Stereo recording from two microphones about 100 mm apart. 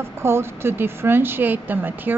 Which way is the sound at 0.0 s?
25° right (ahead or behind).